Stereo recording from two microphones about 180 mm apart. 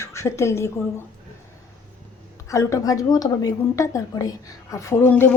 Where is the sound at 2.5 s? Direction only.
15° left (ahead or behind).